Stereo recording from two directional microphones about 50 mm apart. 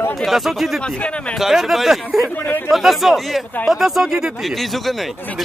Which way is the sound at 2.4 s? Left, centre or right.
Left.